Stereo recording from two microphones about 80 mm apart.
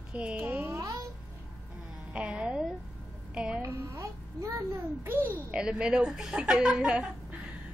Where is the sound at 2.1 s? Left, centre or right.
Centre.